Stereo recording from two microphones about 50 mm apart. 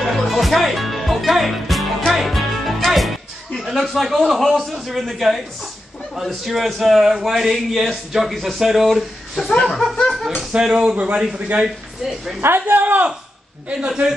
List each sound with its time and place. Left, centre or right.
0.0 s a man's voice: centre
12.4 s a woman's voice: right